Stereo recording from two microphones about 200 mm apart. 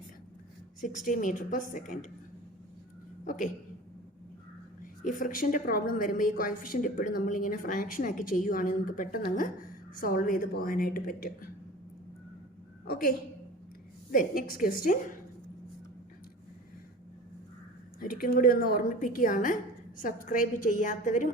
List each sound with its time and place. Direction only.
0.8 s a woman's voice: 40° left (ahead or behind)
3.2 s a woman's voice: 40° left (ahead or behind)
4.8 s a woman's voice: 45° left (ahead or behind)
12.9 s a woman's voice: 45° left (ahead or behind)
18.0 s a woman's voice: 45° left (ahead or behind)